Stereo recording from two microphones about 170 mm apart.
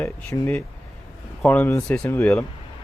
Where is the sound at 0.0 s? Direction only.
15° left (ahead or behind).